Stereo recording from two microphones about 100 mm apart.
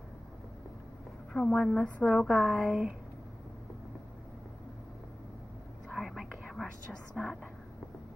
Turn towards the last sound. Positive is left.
turn(degrees=0)  # may be behind; listen again after turning